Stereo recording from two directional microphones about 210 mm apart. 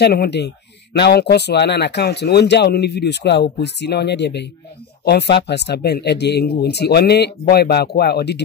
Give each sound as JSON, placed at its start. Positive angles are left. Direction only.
{"t": 0.0, "sound": "speech", "side_deg": 50}